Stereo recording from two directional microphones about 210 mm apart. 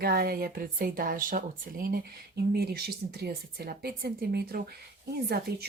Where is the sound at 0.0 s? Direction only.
45° right (ahead or behind).